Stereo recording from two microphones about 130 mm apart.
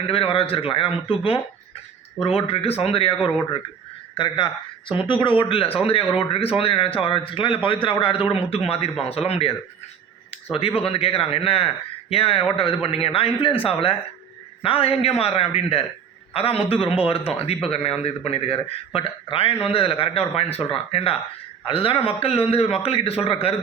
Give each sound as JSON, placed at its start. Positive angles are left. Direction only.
{"t": 0.1, "sound": "a man's voice", "side_deg": 45}
{"t": 4.2, "sound": "a man's voice", "side_deg": 40}
{"t": 10.8, "sound": "a man's voice", "side_deg": 45}